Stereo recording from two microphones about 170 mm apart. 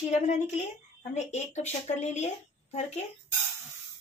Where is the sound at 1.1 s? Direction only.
40° left (ahead or behind).